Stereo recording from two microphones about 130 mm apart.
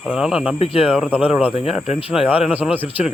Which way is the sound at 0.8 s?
10° right (ahead or behind).